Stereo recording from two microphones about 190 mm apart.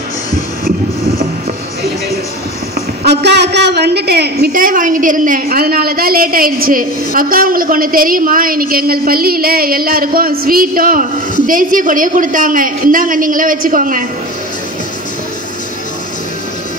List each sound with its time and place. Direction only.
3.0 s a woman's voice: 60° right (ahead or behind)